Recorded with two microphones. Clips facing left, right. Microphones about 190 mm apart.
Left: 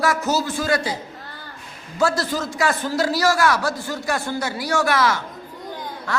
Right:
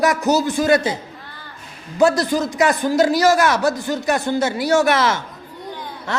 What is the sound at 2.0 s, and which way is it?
A man's voice, 20° right (ahead or behind).